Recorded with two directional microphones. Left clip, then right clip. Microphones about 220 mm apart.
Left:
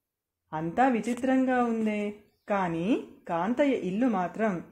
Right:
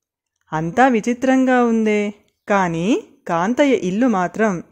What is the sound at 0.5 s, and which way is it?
Speech, 45° right (ahead or behind).